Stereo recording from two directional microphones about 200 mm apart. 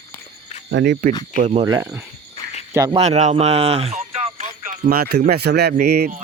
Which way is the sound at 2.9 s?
35° right (ahead or behind).